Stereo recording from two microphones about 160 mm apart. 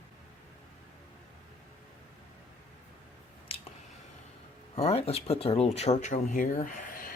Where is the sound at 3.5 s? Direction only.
35° left (ahead or behind).